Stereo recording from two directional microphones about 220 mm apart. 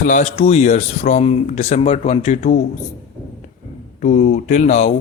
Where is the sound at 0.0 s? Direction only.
35° left (ahead or behind).